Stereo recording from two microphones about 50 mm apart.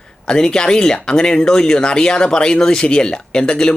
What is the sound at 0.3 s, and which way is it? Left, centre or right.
Speech, centre.